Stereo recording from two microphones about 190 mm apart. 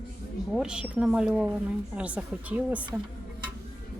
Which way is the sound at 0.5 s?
5° right (ahead or behind).